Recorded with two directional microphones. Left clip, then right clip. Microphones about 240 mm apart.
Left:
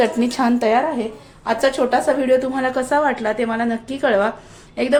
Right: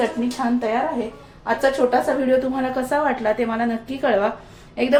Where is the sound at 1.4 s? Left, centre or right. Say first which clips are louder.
Left 1 dB; left; by 4.9 s centre.